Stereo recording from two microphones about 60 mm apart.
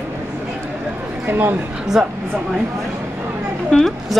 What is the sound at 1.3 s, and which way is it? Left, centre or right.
Speech, right.